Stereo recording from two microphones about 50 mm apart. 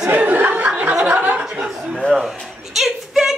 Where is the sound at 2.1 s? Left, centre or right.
Centre.